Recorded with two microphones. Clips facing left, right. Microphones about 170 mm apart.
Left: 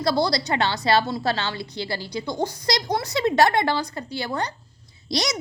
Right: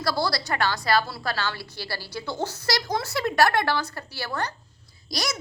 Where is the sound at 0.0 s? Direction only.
20° left (ahead or behind).